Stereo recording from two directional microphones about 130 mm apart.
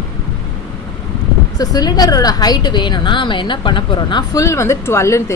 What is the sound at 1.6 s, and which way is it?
A woman's voice, 30° left (ahead or behind).